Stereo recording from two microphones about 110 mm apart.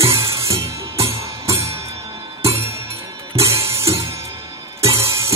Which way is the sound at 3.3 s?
25° right (ahead or behind).